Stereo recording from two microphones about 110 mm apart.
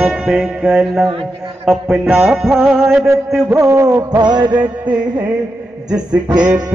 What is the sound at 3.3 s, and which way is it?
Music, 25° right (ahead or behind).